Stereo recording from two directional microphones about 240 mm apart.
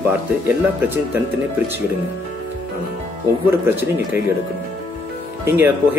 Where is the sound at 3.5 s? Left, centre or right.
Centre.